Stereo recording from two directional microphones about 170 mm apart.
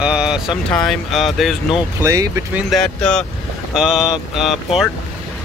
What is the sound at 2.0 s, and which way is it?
Speech, 20° right (ahead or behind).